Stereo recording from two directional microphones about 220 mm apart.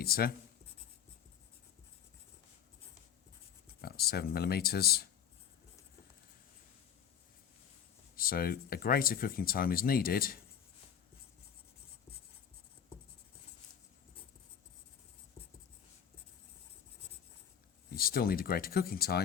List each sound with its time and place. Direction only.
0.0 s speech: 45° left (ahead or behind)
3.8 s speech: 45° left (ahead or behind)
8.1 s speech: 40° left (ahead or behind)
17.9 s speech: 45° left (ahead or behind)